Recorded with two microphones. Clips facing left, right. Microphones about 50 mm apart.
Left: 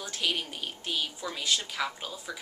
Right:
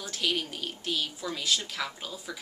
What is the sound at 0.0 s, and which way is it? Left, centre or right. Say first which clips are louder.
A woman's voice: right 1 dB; centre.